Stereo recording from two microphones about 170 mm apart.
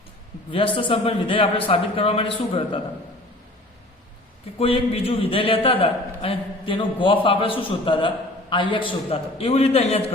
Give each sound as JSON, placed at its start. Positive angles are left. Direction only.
{"t": 0.5, "sound": "a man's voice", "side_deg": 30}
{"t": 4.5, "sound": "a man's voice", "side_deg": 35}